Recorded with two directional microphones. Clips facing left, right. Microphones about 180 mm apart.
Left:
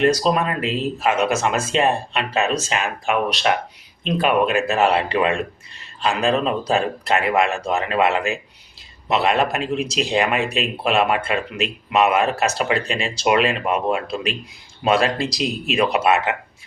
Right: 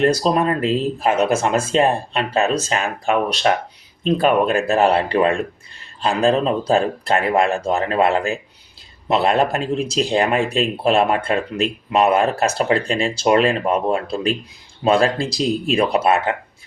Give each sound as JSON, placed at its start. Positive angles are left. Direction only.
{"t": 0.2, "sound": "speech", "side_deg": -35}